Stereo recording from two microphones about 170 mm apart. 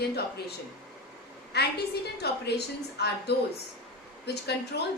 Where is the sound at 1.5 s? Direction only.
75° left (ahead or behind).